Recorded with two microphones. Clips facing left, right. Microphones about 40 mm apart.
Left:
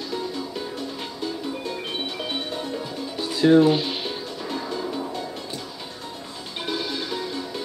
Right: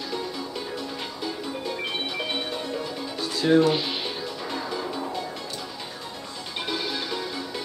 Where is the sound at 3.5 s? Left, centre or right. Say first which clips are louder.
Left 4 dB; centre.